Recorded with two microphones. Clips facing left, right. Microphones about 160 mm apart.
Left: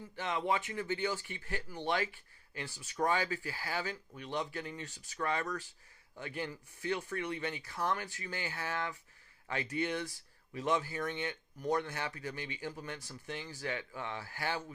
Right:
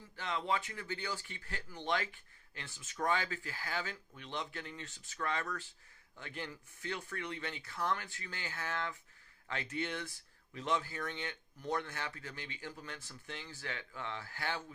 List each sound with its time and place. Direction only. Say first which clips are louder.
0.2 s speech: left 3 dB; 15° left (ahead or behind)